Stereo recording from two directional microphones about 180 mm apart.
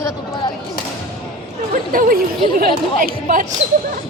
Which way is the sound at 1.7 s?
50° right (ahead or behind).